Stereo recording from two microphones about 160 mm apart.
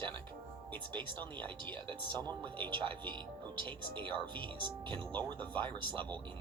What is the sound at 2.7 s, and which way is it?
Speech, 30° right (ahead or behind).